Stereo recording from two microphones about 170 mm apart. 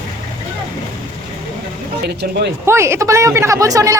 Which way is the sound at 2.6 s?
15° right (ahead or behind).